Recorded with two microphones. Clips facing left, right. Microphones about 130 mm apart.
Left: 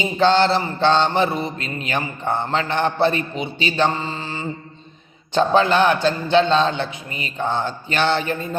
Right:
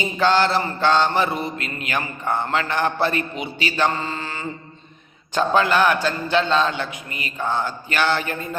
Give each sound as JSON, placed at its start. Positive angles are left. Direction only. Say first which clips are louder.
{"t": 0.2, "sound": "mantra", "louder": "left 2 dB", "side_deg": 25}